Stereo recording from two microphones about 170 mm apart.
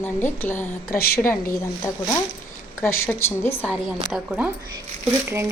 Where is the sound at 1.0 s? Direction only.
65° left (ahead or behind).